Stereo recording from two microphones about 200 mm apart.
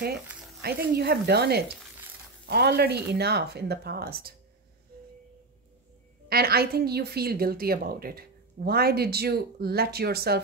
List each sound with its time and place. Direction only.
0.6 s a woman's voice: 50° right (ahead or behind)
6.2 s a woman's voice: 50° right (ahead or behind)